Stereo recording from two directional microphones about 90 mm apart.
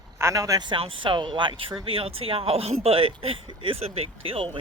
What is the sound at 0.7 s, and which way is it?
Speech, 70° right (ahead or behind).